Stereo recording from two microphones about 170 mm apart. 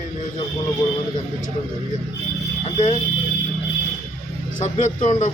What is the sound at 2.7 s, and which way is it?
Speech, 45° left (ahead or behind).